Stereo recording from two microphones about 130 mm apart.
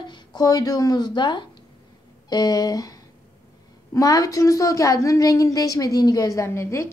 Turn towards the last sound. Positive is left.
turn(degrees=20)  # may be behind; listen again after turning